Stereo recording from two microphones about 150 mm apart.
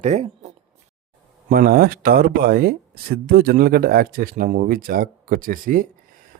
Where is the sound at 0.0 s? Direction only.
45° right (ahead or behind).